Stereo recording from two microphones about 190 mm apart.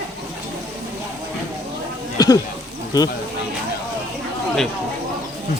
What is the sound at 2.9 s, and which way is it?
Speech, 20° left (ahead or behind).